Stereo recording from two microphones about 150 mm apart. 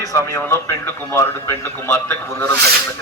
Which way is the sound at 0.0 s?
20° left (ahead or behind).